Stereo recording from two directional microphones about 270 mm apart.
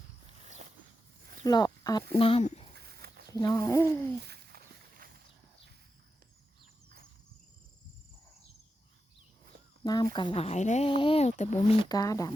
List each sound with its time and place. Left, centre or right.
0.4 s a sound: right
1.5 s speech: centre
2.7 s a sound: right
3.3 s speech: centre
4.2 s walk: right
9.8 s speech: centre
11.9 s speech: centre